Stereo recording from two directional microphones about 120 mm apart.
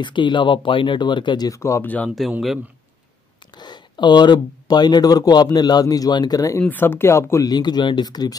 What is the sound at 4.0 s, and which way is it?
Speech, 40° left (ahead or behind).